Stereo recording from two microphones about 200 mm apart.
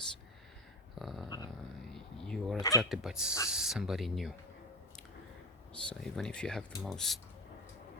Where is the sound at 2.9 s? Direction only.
Centre (ahead or behind).